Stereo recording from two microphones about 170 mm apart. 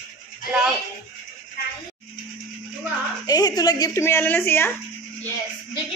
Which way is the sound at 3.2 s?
25° left (ahead or behind).